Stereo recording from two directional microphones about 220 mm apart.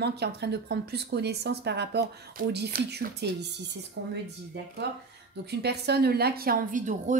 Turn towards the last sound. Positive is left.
turn(degrees=-35)  # may be behind; listen again after turning